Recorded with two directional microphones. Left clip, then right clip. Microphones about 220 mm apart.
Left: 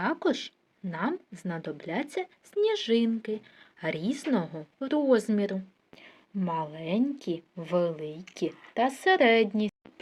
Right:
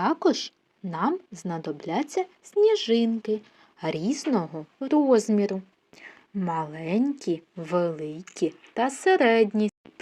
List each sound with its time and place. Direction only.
0.0 s speech: 10° right (ahead or behind)